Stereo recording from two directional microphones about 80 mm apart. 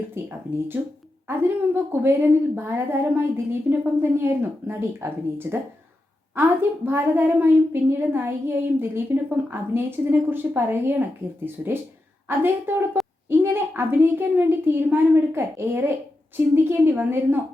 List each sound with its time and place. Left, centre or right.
0.1 s a woman's voice: right